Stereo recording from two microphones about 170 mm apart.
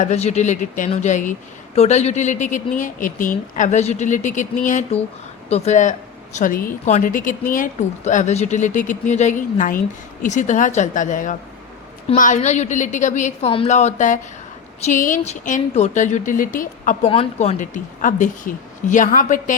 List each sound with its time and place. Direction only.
0.0 s a woman's voice: 40° left (ahead or behind)
17.1 s a woman's voice: 35° left (ahead or behind)